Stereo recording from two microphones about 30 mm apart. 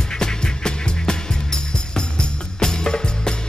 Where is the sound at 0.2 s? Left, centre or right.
Left.